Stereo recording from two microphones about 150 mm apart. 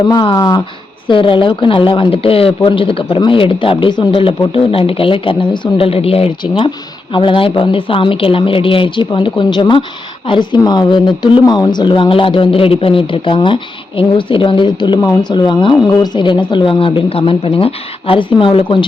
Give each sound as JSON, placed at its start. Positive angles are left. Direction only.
{"t": 0.1, "sound": "speech", "side_deg": 25}